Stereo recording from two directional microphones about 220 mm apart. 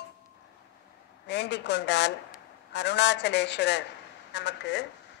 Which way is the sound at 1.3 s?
50° left (ahead or behind).